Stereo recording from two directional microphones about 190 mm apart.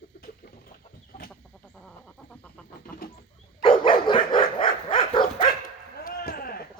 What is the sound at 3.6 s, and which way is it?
Dog, 30° left (ahead or behind).